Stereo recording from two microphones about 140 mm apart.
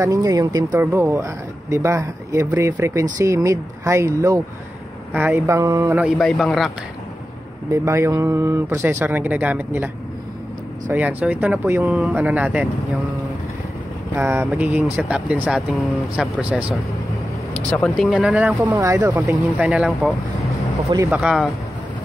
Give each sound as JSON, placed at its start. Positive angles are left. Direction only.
{"t": 0.0, "sound": "speech", "side_deg": -25}
{"t": 0.7, "sound": "speech", "side_deg": -15}
{"t": 5.9, "sound": "speech", "side_deg": 0}
{"t": 7.7, "sound": "speech", "side_deg": -20}
{"t": 10.9, "sound": "speech", "side_deg": -10}
{"t": 14.1, "sound": "speech", "side_deg": -20}
{"t": 17.8, "sound": "speech", "side_deg": 0}